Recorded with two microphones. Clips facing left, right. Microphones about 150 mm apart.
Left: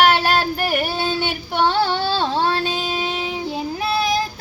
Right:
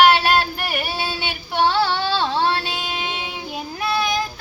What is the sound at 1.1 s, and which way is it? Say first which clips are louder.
Child singing: left 1 dB; 50° left (ahead or behind).